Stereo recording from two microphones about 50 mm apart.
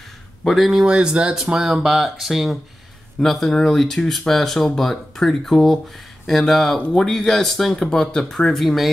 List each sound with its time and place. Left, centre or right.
0.5 s speech: centre
0.9 s speech: centre
6.8 s speech: left
7.1 s speech: centre
8.5 s speech: centre